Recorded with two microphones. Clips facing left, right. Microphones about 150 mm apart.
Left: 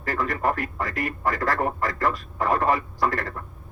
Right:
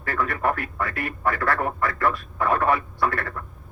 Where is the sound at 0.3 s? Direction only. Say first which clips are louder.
Even; 40° left (ahead or behind).